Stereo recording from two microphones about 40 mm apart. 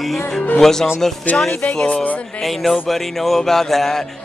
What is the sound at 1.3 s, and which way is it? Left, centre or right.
Speech, left.